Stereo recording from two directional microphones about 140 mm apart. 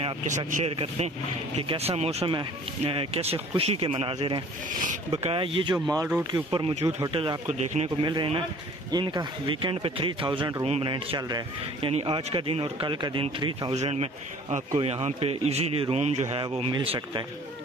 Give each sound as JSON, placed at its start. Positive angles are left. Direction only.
{"t": 0.7, "sound": "speech", "side_deg": -45}
{"t": 6.7, "sound": "speech", "side_deg": -50}
{"t": 7.1, "sound": "speech", "side_deg": -40}
{"t": 7.5, "sound": "a man's voice", "side_deg": -55}
{"t": 8.0, "sound": "speech", "side_deg": -35}
{"t": 11.1, "sound": "speech", "side_deg": -30}
{"t": 11.9, "sound": "speech", "side_deg": -45}
{"t": 13.7, "sound": "speech", "side_deg": -50}
{"t": 14.8, "sound": "speech", "side_deg": -45}
{"t": 16.7, "sound": "speech", "side_deg": -35}